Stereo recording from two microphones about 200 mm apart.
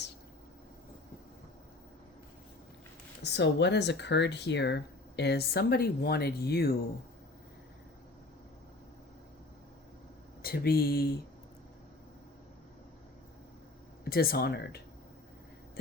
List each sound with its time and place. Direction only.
3.2 s speech: 60° left (ahead or behind)
10.4 s speech: 50° left (ahead or behind)
14.0 s speech: 50° left (ahead or behind)